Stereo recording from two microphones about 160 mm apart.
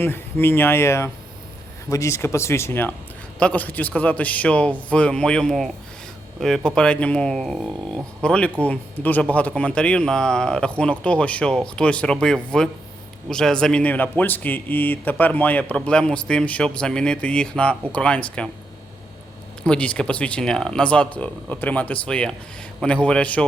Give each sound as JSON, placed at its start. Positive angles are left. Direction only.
{"t": 0.0, "sound": "speech", "side_deg": 15}
{"t": 19.6, "sound": "speech", "side_deg": 5}